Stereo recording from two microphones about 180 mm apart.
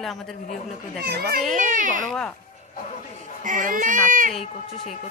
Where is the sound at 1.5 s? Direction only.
45° right (ahead or behind).